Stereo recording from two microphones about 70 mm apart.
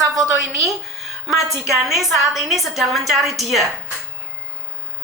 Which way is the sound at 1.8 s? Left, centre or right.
Centre.